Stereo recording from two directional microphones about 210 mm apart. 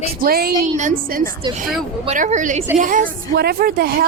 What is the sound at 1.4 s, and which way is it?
Speech, 20° right (ahead or behind).